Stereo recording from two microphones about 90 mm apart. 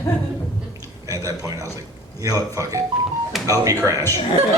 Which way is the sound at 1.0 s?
40° right (ahead or behind).